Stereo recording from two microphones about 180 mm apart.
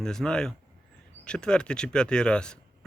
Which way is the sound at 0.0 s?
5° left (ahead or behind).